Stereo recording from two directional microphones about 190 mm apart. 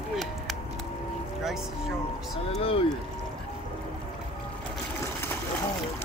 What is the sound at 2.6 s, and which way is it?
Speech, 30° left (ahead or behind).